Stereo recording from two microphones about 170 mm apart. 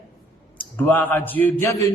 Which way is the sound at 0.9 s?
10° left (ahead or behind).